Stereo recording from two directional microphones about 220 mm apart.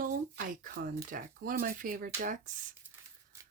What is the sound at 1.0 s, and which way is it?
Speech, 40° right (ahead or behind).